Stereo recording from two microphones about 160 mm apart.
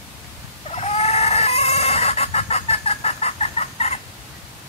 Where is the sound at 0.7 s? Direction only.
40° left (ahead or behind).